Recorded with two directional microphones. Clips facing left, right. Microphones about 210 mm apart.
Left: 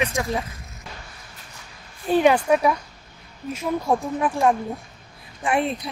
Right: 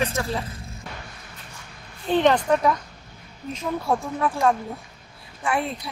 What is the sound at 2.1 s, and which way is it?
A woman's voice, 10° left (ahead or behind).